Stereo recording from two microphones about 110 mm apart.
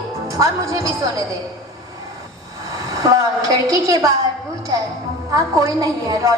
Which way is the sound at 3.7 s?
30° right (ahead or behind).